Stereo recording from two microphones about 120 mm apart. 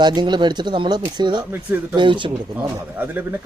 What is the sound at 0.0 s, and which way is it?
Speech, 35° right (ahead or behind).